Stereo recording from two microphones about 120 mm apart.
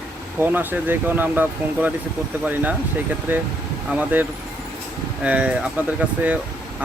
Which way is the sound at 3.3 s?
15° right (ahead or behind).